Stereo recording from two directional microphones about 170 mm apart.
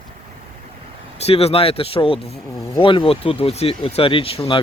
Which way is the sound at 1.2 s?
35° left (ahead or behind).